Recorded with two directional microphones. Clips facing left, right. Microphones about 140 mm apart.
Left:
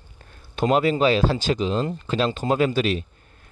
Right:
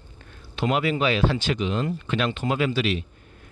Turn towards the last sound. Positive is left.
turn(degrees=40)  # may be behind; listen again after turning